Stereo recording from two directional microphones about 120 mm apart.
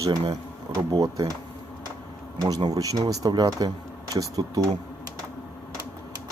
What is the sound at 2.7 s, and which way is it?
Speech, 30° right (ahead or behind).